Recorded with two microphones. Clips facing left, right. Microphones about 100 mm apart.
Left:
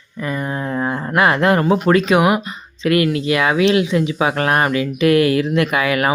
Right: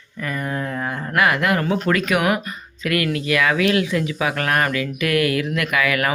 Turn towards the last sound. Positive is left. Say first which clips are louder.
# left 4 dB
turn(degrees=25)  # may be behind; listen again after turning